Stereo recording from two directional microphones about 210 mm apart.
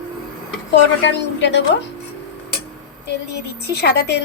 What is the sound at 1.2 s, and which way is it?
Speech, 55° left (ahead or behind).